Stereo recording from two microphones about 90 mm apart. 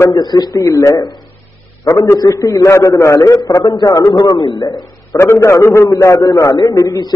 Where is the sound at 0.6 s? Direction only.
35° left (ahead or behind).